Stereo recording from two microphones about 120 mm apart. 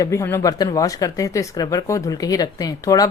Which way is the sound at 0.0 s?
25° left (ahead or behind).